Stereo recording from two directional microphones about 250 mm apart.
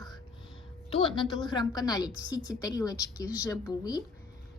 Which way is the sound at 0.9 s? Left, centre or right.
Left.